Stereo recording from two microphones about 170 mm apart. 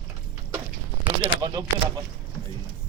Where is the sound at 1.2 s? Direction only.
25° right (ahead or behind).